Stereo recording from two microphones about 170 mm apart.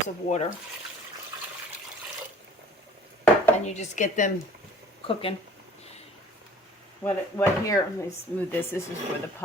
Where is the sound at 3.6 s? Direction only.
45° left (ahead or behind).